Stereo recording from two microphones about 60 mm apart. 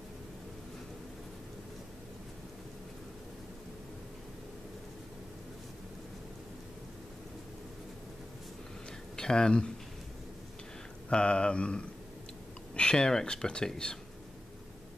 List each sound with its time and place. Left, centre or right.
9.1 s speech: centre
11.1 s speech: centre